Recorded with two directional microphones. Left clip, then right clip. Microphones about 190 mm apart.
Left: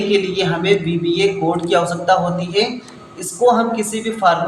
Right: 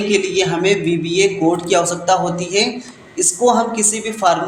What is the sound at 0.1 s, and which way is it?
A man's voice, 45° right (ahead or behind).